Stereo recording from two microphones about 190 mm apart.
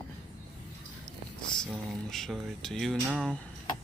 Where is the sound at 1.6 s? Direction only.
Centre (ahead or behind).